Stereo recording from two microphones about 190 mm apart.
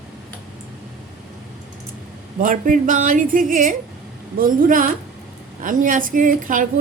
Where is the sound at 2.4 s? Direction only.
45° right (ahead or behind).